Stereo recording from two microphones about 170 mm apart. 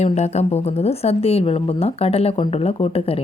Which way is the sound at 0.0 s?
40° left (ahead or behind).